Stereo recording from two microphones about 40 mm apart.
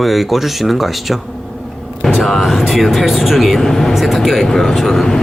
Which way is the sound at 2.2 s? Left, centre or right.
Centre.